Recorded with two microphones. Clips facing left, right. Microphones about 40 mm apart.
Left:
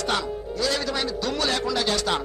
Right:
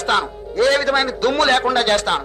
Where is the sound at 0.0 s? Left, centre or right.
Right.